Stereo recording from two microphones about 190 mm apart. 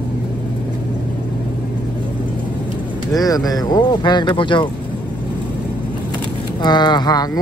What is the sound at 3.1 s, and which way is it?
Speech, 20° left (ahead or behind).